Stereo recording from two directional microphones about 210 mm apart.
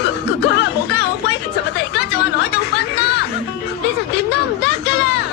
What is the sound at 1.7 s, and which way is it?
Chatter, 55° left (ahead or behind).